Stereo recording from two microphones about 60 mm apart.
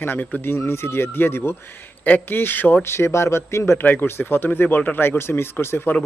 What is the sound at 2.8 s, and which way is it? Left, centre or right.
Speech, left.